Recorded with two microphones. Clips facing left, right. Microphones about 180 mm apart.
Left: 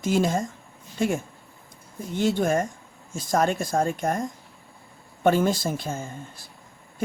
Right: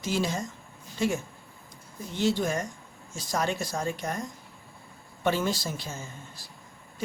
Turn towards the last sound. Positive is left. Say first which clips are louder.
# left 6 dB
turn(degrees=55)  # may be behind; listen again after turning